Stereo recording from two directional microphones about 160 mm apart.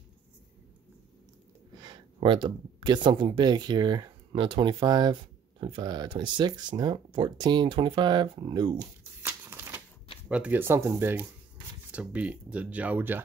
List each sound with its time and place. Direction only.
1.8 s speech: 30° right (ahead or behind)
9.2 s crumpling: 15° right (ahead or behind)
10.3 s speech: 10° right (ahead or behind)